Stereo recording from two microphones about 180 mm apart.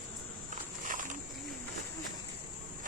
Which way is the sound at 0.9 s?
45° right (ahead or behind).